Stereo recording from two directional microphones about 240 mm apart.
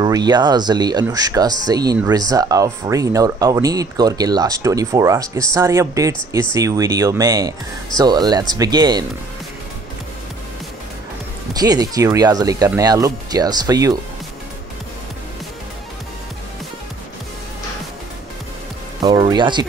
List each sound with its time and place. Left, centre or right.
0.0 s speech: centre
11.5 s speech: centre
18.9 s speech: centre